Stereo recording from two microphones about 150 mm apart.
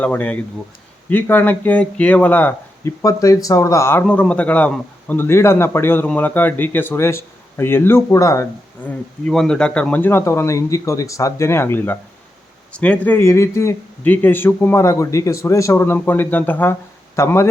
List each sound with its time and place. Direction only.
0.0 s a man's voice: 10° left (ahead or behind)
3.0 s a man's voice: 20° left (ahead or behind)